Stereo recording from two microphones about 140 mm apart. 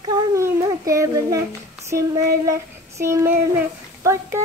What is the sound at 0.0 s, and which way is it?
Child singing, 25° right (ahead or behind).